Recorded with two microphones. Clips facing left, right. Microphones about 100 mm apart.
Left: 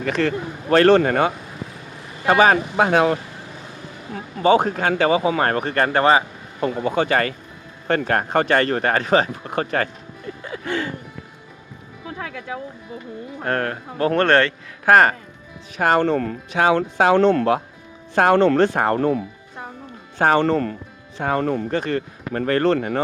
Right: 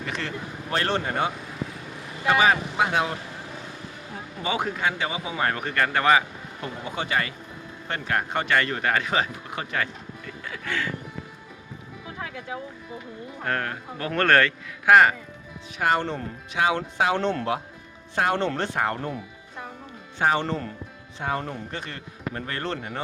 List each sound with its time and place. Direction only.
0.2 s speech: 80° left; by 1.3 s 60° left (ahead or behind)
2.2 s speech: 45° left (ahead or behind)
4.4 s speech: 35° left (ahead or behind)
4.9 s speech: 65° left (ahead or behind); by 5.6 s 50° left (ahead or behind)
5.6 s speech: 35° left (ahead or behind)
6.7 s speech: 50° left (ahead or behind)
10.4 s music: 30° left (ahead or behind)
12.0 s music: 90° left
13.4 s speech: 45° left (ahead or behind)
14.0 s music: 30° left (ahead or behind)
14.8 s speech: 40° left (ahead or behind)
18.9 s speech: 60° left (ahead or behind)
20.1 s speech: 50° left (ahead or behind); by 21.7 s 65° left (ahead or behind)
21.7 s speech: 45° left (ahead or behind)